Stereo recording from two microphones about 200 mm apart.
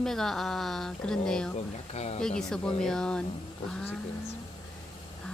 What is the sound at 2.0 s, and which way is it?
Speech, 35° left (ahead or behind).